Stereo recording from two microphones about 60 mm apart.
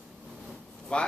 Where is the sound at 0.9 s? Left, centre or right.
Centre.